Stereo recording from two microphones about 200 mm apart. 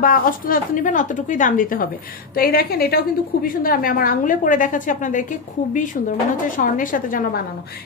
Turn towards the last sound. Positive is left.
turn(degrees=45)  # may be behind; listen again after turning